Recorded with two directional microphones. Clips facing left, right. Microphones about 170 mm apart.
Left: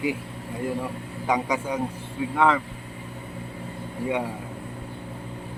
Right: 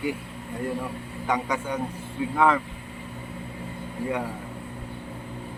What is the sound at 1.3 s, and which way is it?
Speech, 10° left (ahead or behind).